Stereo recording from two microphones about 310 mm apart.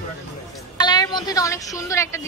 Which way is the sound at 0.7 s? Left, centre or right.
Centre.